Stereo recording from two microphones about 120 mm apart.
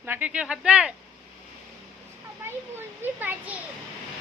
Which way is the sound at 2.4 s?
20° right (ahead or behind).